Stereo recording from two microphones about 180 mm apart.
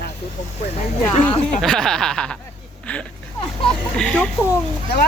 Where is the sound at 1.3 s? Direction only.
35° left (ahead or behind).